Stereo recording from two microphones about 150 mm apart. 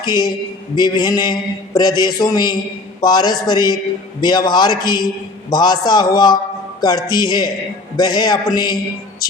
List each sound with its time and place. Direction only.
0.0 s a man's voice: 30° left (ahead or behind)